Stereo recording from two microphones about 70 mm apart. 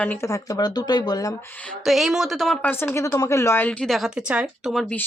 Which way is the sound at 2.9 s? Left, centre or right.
Left.